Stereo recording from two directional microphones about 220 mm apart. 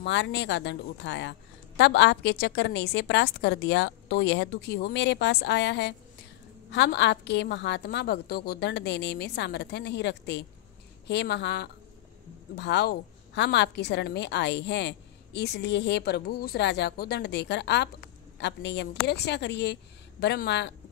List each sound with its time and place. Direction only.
0.0 s a woman's voice: 55° left (ahead or behind)